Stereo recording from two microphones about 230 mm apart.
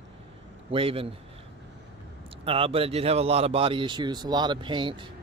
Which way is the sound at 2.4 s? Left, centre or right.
Right.